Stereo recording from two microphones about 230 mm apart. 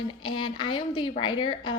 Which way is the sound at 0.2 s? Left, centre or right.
Left.